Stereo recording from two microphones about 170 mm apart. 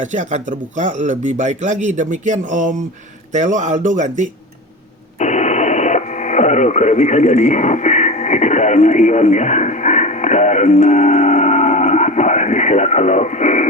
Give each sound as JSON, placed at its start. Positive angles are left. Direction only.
{"t": 0.0, "sound": "speech", "side_deg": -45}
{"t": 5.2, "sound": "radio", "side_deg": 45}